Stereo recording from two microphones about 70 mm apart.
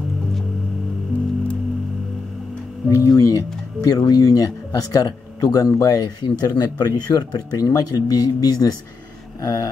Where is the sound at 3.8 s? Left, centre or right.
Left.